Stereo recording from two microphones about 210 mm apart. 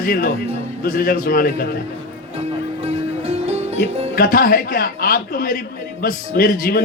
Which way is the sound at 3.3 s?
30° right (ahead or behind).